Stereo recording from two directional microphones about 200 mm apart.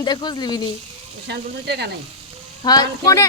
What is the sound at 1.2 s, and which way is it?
Speech, 55° right (ahead or behind).